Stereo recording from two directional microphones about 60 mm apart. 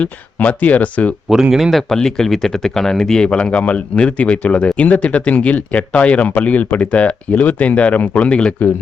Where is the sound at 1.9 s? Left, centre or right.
Centre.